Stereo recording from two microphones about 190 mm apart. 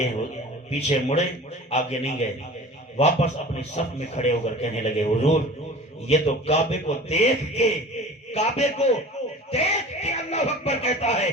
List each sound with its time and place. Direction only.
0.7 s a man's voice: 35° left (ahead or behind)